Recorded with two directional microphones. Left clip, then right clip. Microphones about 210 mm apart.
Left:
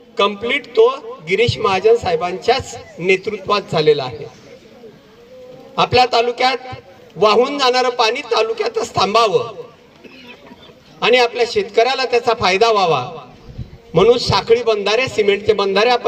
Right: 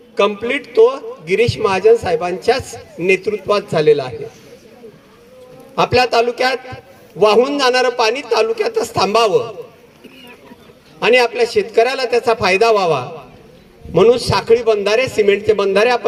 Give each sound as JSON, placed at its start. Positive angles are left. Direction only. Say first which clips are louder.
{"t": 0.2, "sound": "a man's voice", "louder": "right 1 dB", "side_deg": -45}
{"t": 5.7, "sound": "a man's voice", "louder": "even", "side_deg": -45}
{"t": 11.0, "sound": "a man's voice", "louder": "right 1 dB", "side_deg": -45}